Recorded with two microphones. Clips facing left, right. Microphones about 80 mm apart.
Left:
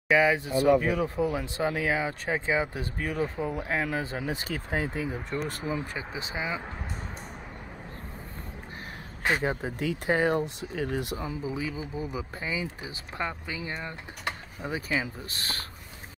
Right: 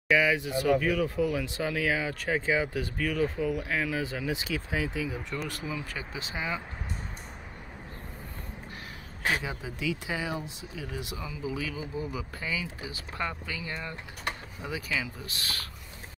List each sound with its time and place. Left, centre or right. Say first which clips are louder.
0.1 s speech: left 2 dB; left
5.9 s speech: left 2 dB; left
9.4 s speech: left 6 dB; left
11.4 s speech: left 1 dB; left